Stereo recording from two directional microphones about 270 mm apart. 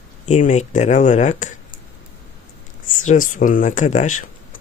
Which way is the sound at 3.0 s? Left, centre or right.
Left.